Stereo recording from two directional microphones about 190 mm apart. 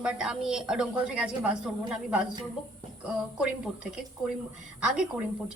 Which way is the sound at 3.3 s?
5° right (ahead or behind).